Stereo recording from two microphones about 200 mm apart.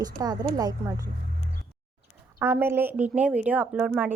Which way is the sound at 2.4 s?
10° right (ahead or behind).